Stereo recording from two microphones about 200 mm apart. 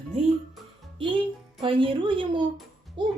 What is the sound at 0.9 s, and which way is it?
Music, 25° right (ahead or behind).